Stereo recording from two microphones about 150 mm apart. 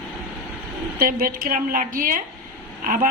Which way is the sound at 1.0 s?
80° right.